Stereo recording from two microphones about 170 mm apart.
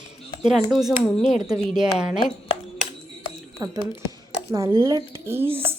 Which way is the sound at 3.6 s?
20° right (ahead or behind).